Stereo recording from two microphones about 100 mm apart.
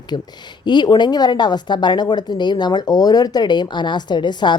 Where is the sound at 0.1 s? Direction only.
55° left (ahead or behind).